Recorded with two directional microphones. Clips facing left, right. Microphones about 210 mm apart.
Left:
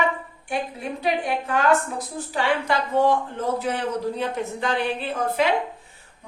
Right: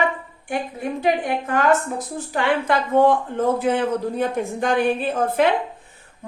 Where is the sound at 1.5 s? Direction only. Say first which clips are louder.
Right 2 dB; 55° right (ahead or behind).